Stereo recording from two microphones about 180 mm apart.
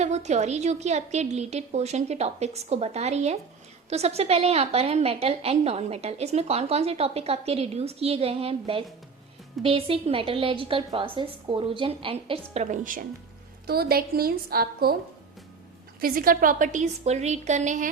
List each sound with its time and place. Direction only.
0.0 s a woman's voice: 40° right (ahead or behind)
12.7 s a woman's voice: 50° right (ahead or behind)
13.7 s a woman's voice: 60° right (ahead or behind)
16.0 s a woman's voice: 55° right (ahead or behind)